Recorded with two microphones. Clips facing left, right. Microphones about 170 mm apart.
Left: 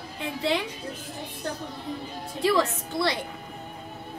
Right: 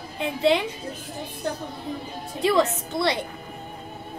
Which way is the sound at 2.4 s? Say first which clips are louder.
Right 2 dB; 20° right (ahead or behind).